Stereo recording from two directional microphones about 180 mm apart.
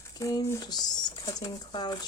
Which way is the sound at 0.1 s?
20° left (ahead or behind).